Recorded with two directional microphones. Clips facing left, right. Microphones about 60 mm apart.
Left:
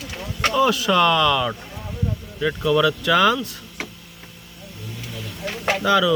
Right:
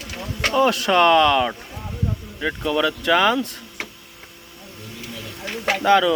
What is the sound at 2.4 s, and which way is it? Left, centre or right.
Speech, centre.